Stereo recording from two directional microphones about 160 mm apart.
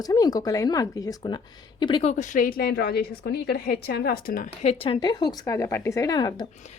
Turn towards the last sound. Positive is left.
turn(degrees=25)  # may be behind; listen again after turning